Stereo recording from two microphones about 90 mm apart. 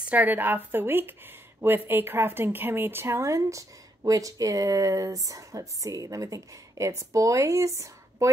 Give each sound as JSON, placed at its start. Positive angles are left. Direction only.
{"t": 0.1, "sound": "a woman's voice", "side_deg": -20}